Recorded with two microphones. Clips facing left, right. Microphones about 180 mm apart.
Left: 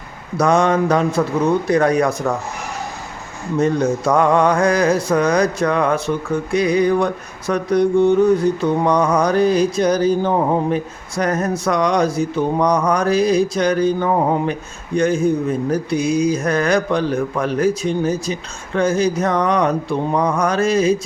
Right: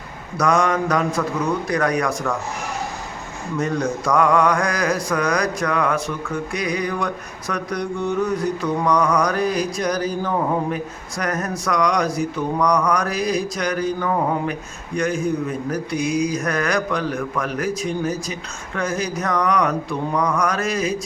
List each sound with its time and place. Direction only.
0.3 s mantra: 25° left (ahead or behind)
3.6 s mantra: 25° left (ahead or behind)